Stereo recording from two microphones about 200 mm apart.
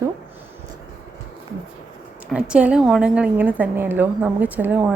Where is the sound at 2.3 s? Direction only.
5° right (ahead or behind).